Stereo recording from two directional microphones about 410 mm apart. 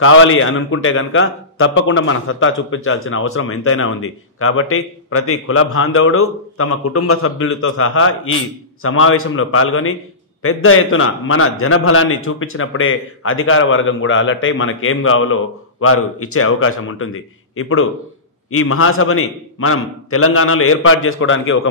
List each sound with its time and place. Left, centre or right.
0.0 s a man's voice: left